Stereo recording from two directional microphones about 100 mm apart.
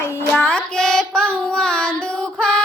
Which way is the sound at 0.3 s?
10° left (ahead or behind).